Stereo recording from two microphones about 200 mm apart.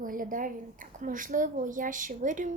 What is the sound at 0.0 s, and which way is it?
Speech, 45° right (ahead or behind).